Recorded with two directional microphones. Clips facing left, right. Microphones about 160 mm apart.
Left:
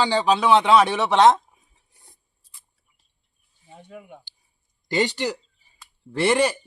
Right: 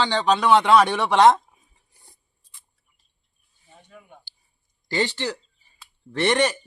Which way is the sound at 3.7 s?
70° left (ahead or behind).